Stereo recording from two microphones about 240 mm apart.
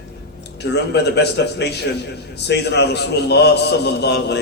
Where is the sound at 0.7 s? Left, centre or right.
Left.